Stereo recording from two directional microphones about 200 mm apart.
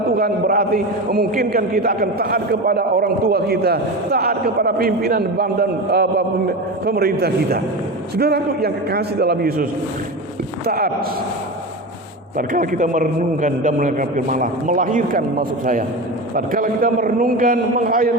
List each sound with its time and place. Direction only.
0.2 s a man's voice: 50° right (ahead or behind)
10.7 s a man's voice: 50° right (ahead or behind)
12.4 s a man's voice: 40° right (ahead or behind)